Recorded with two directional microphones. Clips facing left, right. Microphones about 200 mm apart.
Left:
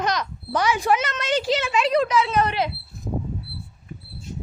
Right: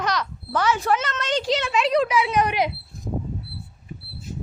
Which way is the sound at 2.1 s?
15° right (ahead or behind).